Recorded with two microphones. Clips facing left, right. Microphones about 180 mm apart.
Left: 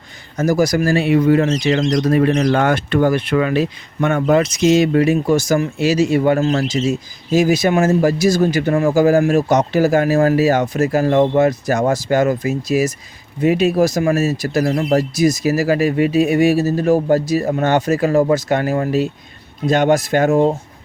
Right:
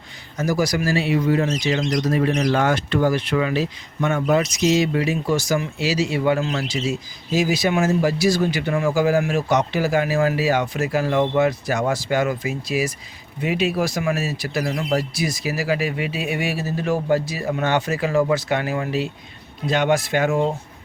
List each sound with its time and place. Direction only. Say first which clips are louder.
0.3 s speech: left 6 dB; 45° left (ahead or behind)